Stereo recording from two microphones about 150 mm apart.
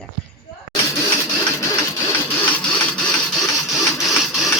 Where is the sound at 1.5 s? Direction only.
20° left (ahead or behind).